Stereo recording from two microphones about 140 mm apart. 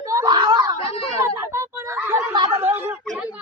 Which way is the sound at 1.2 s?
20° right (ahead or behind).